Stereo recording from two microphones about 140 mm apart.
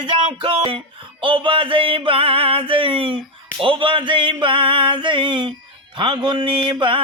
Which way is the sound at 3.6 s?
35° right (ahead or behind).